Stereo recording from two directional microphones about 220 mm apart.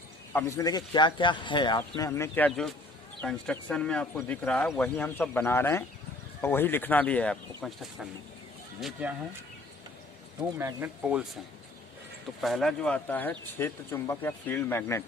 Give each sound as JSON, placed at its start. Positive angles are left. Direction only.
{"t": 0.3, "sound": "speech", "side_deg": 15}
{"t": 10.6, "sound": "speech", "side_deg": -10}
{"t": 12.4, "sound": "speech", "side_deg": 0}